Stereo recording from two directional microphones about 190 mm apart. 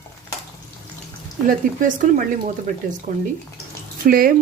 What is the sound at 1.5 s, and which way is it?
Speech, 45° right (ahead or behind).